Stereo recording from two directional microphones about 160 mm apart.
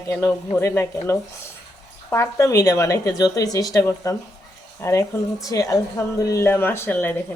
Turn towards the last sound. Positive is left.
turn(degrees=10)  # may be behind; listen again after turning